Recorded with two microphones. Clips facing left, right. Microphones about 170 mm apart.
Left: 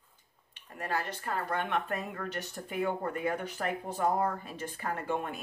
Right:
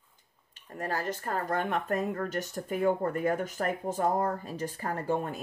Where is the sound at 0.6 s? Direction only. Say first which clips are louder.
Right 1 dB; 40° right (ahead or behind).